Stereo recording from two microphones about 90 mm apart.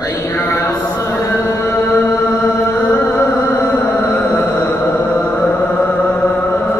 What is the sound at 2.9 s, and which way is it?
Music, 20° left (ahead or behind).